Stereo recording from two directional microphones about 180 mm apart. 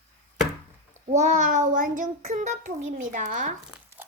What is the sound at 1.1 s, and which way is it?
A child's voice, 40° right (ahead or behind).